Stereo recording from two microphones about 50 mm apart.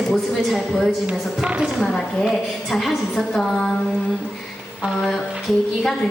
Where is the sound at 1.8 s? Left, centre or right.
Centre.